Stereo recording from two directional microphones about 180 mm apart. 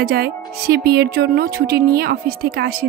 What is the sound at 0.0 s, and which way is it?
A woman's voice, 55° right (ahead or behind).